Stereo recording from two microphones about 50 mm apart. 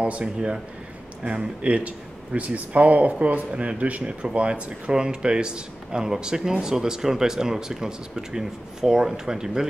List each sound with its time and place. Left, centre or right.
0.0 s speech: right